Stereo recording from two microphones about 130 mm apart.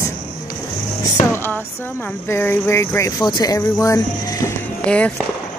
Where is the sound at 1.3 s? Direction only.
15° left (ahead or behind).